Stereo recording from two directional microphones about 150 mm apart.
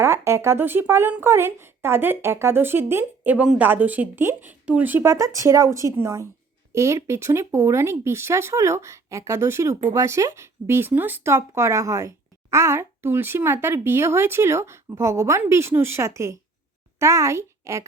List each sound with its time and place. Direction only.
0.0 s a woman's voice: 15° right (ahead or behind)